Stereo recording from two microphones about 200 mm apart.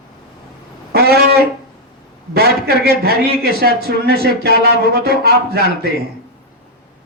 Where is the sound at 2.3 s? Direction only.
50° right (ahead or behind).